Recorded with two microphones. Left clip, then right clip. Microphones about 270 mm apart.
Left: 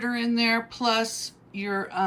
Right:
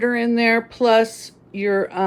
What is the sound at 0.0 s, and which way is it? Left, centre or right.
Speech, centre.